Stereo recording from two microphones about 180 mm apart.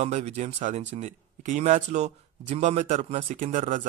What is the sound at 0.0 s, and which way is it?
Speech, 35° right (ahead or behind).